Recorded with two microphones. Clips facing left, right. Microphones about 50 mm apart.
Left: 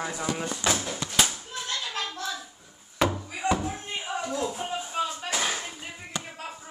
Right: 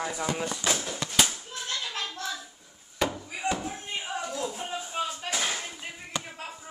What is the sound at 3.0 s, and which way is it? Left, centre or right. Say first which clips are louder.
Knock: left 4 dB; centre.